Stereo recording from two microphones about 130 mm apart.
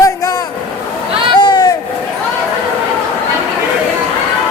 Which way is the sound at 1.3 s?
35° left (ahead or behind).